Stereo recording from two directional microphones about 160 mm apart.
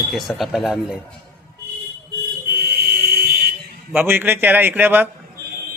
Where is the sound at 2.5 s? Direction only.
70° right (ahead or behind).